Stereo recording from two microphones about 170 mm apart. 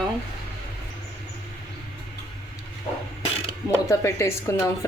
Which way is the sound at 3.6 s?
15° left (ahead or behind).